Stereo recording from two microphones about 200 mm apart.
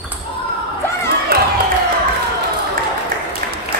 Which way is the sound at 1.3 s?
50° right (ahead or behind).